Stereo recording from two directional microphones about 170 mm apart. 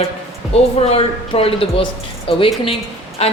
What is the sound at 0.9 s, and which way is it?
Speech, 35° left (ahead or behind).